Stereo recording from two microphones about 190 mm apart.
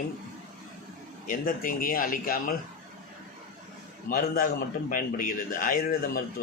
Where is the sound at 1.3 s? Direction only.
45° left (ahead or behind).